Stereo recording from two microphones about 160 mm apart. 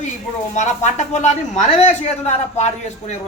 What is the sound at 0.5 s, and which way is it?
Speech, 45° left (ahead or behind).